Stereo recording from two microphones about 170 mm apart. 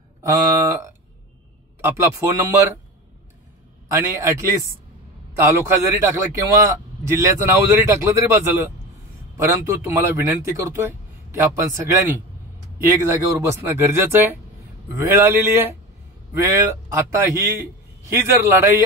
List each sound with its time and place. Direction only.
0.2 s a man's voice: 20° right (ahead or behind)
3.9 s a man's voice: 15° right (ahead or behind)